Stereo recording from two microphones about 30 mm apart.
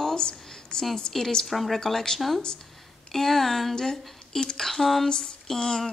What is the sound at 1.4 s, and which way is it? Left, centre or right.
Speech, centre.